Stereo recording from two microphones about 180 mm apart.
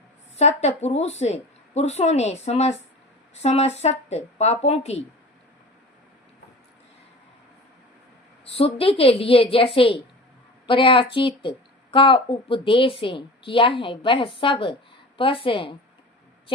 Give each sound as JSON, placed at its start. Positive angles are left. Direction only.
{"t": 0.3, "sound": "a woman's voice", "side_deg": 40}
{"t": 8.4, "sound": "a woman's voice", "side_deg": 35}